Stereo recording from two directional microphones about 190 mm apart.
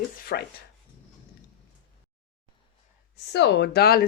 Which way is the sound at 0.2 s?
50° left (ahead or behind).